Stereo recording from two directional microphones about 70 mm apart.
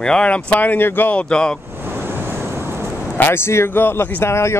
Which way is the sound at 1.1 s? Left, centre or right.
Centre.